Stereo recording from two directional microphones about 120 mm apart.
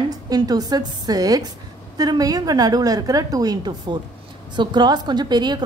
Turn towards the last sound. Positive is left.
turn(degrees=-35)  # may be behind; listen again after turning